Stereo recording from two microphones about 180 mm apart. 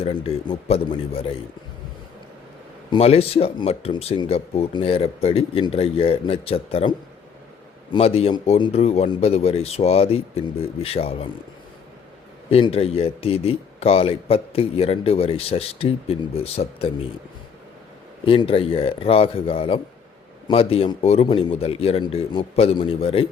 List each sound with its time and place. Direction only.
0.0 s speech: 30° left (ahead or behind)
2.9 s speech: 35° left (ahead or behind)
12.5 s speech: 30° left (ahead or behind)
18.3 s speech: 30° left (ahead or behind)